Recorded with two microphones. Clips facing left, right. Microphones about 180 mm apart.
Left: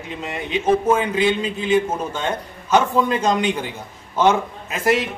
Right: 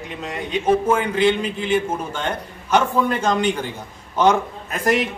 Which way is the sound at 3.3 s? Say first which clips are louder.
Even; 10° left (ahead or behind).